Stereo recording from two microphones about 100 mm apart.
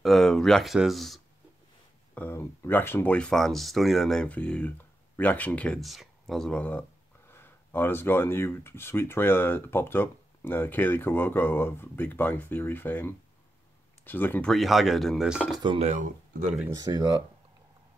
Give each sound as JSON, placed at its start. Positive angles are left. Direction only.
{"t": 0.0, "sound": "speech", "side_deg": 5}
{"t": 2.1, "sound": "speech", "side_deg": 25}
{"t": 4.3, "sound": "speech", "side_deg": 15}
{"t": 5.8, "sound": "speech", "side_deg": 0}
{"t": 14.5, "sound": "speech", "side_deg": 0}
{"t": 15.5, "sound": "speech", "side_deg": -50}